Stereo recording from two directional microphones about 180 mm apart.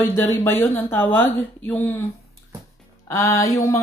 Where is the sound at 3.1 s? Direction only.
15° left (ahead or behind).